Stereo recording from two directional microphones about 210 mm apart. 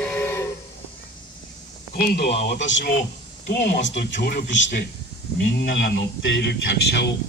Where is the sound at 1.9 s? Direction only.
45° left (ahead or behind).